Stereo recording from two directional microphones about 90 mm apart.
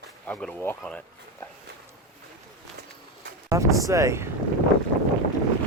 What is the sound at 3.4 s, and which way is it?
Vehicle, 35° right (ahead or behind).